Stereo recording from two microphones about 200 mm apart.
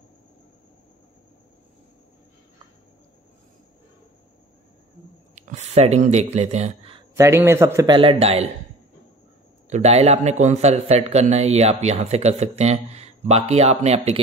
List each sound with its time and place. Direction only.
5.3 s speech: 35° right (ahead or behind)
7.2 s a man's voice: 15° right (ahead or behind); by 8.5 s 30° right (ahead or behind)
9.7 s a man's voice: 35° right (ahead or behind)